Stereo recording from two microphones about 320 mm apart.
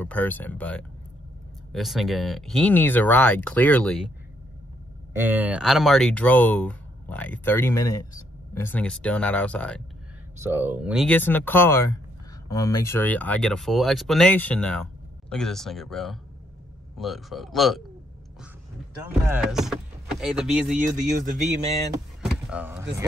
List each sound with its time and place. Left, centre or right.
0.0 s speech: centre
5.1 s speech: centre
10.4 s speech: centre
19.2 s speech: centre
21.0 s a man's voice: right
21.9 s power windows: centre